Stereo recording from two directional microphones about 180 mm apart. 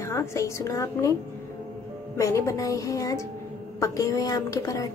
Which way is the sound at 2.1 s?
15° left (ahead or behind).